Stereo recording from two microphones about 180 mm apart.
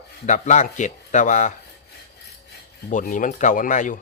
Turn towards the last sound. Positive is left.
turn(degrees=45)  # may be behind; listen again after turning